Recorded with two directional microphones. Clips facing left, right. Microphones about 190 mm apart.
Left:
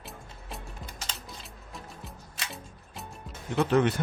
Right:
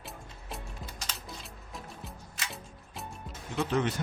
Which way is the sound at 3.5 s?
55° left (ahead or behind).